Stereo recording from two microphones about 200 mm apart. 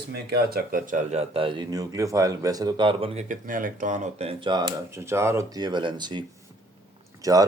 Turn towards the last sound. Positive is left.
turn(degrees=-15)  # may be behind; listen again after turning